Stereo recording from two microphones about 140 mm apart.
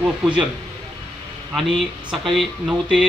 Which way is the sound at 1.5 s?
5° right (ahead or behind).